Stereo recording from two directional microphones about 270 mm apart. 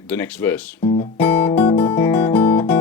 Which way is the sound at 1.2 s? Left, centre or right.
Centre.